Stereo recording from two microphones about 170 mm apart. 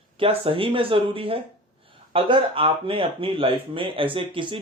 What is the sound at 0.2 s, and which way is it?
Speech, 30° right (ahead or behind).